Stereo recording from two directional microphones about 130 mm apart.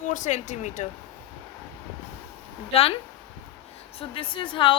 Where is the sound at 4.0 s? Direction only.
45° left (ahead or behind).